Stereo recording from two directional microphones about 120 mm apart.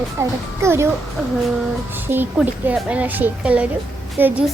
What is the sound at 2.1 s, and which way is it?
A woman's voice, 15° right (ahead or behind).